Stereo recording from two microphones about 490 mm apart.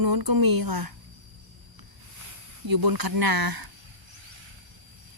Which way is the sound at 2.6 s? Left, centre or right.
Right.